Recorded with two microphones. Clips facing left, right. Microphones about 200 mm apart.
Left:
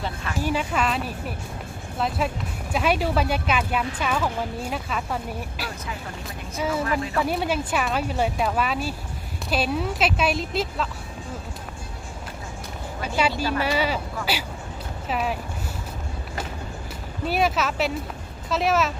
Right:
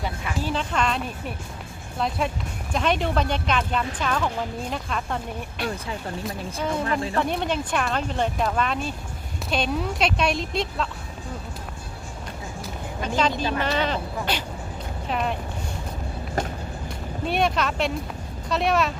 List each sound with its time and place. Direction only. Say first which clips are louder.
0.4 s speech: left 1 dB; 10° left (ahead or behind)
13.0 s a sound: right 1 dB; 10° left (ahead or behind)
13.3 s speech: even; 20° right (ahead or behind)
13.6 s speech: left 1 dB; 10° left (ahead or behind)
17.2 s speech: even; 5° left (ahead or behind)